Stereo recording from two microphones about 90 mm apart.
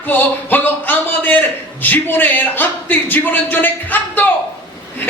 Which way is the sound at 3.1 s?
20° left (ahead or behind).